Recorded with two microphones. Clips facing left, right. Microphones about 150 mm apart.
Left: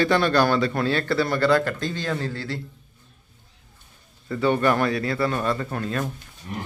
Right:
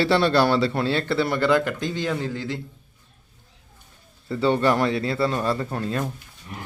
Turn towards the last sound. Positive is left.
turn(degrees=-30)  # may be behind; listen again after turning